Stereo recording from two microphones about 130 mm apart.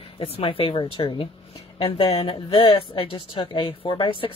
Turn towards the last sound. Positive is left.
turn(degrees=45)  # may be behind; listen again after turning